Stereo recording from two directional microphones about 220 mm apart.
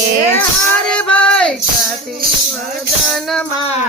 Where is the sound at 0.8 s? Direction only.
5° left (ahead or behind).